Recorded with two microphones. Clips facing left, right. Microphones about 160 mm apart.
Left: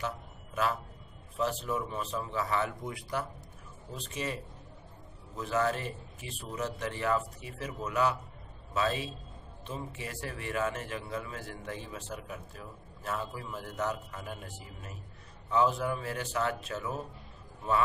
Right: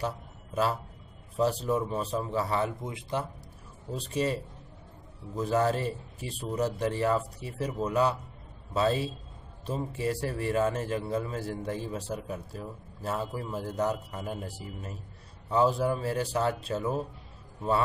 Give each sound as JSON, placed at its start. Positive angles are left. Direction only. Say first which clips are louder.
{"t": 1.3, "sound": "a man's voice", "louder": "right 5 dB", "side_deg": -35}